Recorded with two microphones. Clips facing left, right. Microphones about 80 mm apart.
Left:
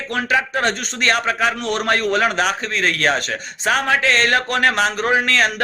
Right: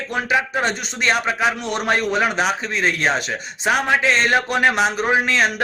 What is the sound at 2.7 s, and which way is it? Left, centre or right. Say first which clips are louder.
Speech: left 1 dB; centre.